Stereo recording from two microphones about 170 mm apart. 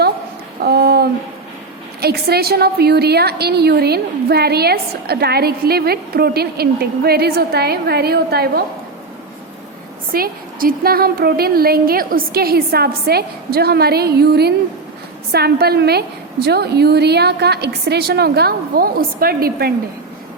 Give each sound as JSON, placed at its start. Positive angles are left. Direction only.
{"t": 0.6, "sound": "a sound", "side_deg": -65}
{"t": 2.0, "sound": "a woman's voice", "side_deg": -70}
{"t": 10.1, "sound": "a woman's voice", "side_deg": -60}